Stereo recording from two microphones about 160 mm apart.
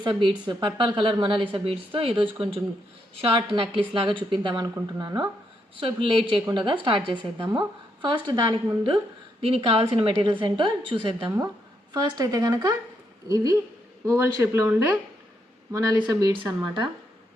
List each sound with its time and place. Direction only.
0.0 s a woman's voice: 30° right (ahead or behind); by 14.9 s 15° right (ahead or behind)
15.7 s speech: 25° right (ahead or behind)
16.4 s speech: 15° right (ahead or behind)
16.6 s speech: 30° right (ahead or behind)